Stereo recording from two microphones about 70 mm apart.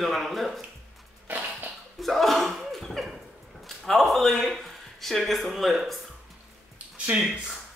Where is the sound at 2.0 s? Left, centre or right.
Centre.